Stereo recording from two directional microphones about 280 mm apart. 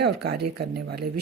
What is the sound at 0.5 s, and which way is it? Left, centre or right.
Speech, right.